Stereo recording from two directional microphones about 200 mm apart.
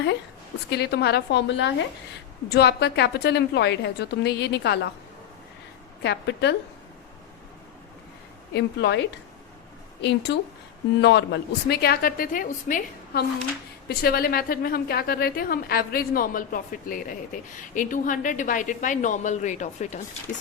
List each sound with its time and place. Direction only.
0.7 s a woman's voice: 55° left (ahead or behind)
6.0 s a woman's voice: 55° left (ahead or behind)
8.5 s a woman's voice: 60° left (ahead or behind); by 20.0 s 35° left (ahead or behind)